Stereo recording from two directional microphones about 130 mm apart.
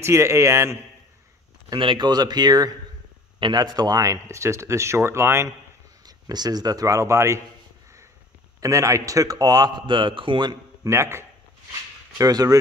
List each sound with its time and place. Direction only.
0.0 s a man's voice: 20° right (ahead or behind)
1.7 s a man's voice: 40° right (ahead or behind); by 7.4 s 20° right (ahead or behind)
8.5 s a man's voice: 25° right (ahead or behind)
10.9 s a man's voice: 20° right (ahead or behind)